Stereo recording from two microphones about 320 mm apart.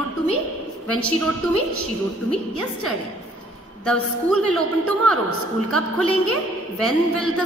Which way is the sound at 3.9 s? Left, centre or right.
Right.